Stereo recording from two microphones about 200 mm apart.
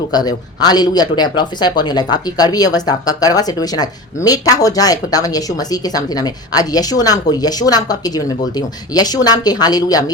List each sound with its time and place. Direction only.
0.1 s speech: 20° left (ahead or behind)